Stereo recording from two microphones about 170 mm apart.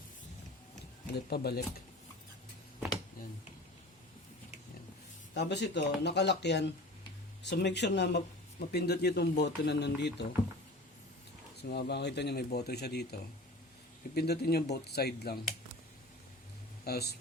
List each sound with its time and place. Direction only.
1.3 s speech: 65° left (ahead or behind)
5.3 s speech: 90° left
11.7 s speech: 80° left
14.2 s speech: 70° left (ahead or behind)
16.8 s speech: 70° left (ahead or behind)